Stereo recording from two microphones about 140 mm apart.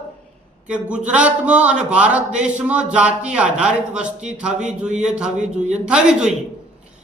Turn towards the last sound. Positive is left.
turn(degrees=-5)  # may be behind; listen again after turning